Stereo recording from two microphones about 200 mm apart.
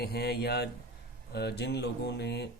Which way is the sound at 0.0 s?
50° left (ahead or behind).